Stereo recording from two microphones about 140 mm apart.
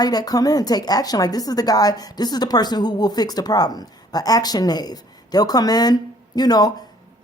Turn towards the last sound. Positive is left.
turn(degrees=30)  # may be behind; listen again after turning